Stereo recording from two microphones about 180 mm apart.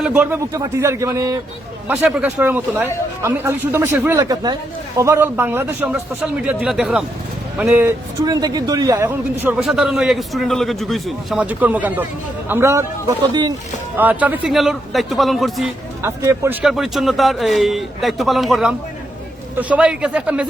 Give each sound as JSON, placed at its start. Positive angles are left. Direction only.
{"t": 0.0, "sound": "a man's voice", "side_deg": -10}
{"t": 1.9, "sound": "a man's voice", "side_deg": -5}
{"t": 13.9, "sound": "a man's voice", "side_deg": -10}
{"t": 16.0, "sound": "a man's voice", "side_deg": -15}